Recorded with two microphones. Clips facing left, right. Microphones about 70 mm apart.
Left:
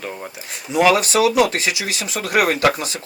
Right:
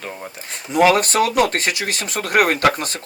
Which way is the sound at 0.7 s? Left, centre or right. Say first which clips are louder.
Right 1 dB; right.